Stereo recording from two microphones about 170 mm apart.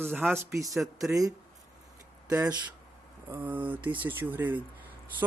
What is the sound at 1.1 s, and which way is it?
Speech, 20° right (ahead or behind).